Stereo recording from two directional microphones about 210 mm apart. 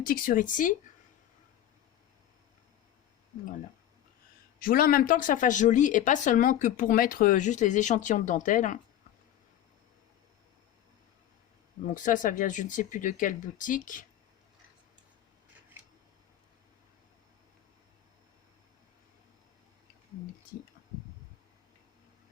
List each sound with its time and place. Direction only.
0.0 s a woman's voice: 40° left (ahead or behind)
4.6 s a woman's voice: 45° left (ahead or behind)
11.9 s a woman's voice: 40° left (ahead or behind)